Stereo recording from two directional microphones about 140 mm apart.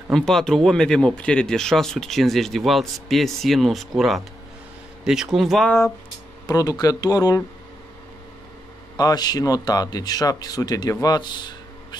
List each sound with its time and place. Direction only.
0.1 s speech: centre (ahead or behind)
6.4 s speech: 25° left (ahead or behind)
8.9 s speech: 30° left (ahead or behind)